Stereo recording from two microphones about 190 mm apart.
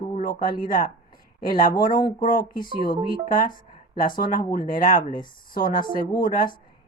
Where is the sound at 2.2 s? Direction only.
45° left (ahead or behind).